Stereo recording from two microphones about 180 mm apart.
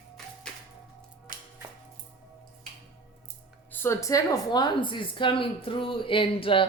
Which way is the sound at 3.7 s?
15° left (ahead or behind).